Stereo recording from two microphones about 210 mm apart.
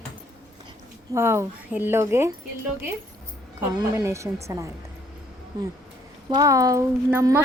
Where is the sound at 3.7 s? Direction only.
15° right (ahead or behind).